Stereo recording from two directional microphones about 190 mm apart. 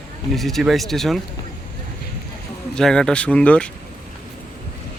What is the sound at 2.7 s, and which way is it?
Speech, 5° left (ahead or behind).